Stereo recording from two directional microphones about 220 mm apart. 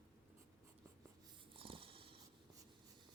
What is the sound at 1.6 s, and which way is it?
Writing, 25° right (ahead or behind).